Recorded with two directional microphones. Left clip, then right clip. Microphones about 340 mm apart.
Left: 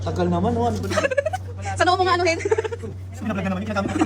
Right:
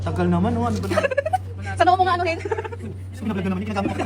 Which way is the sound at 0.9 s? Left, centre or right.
Centre.